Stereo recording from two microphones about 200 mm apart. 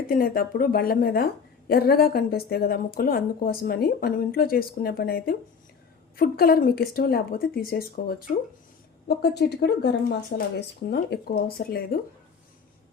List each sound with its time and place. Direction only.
0.1 s a woman's voice: 45° left (ahead or behind)